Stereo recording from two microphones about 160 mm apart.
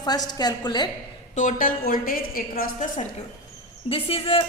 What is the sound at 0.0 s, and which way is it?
Speech, 25° left (ahead or behind).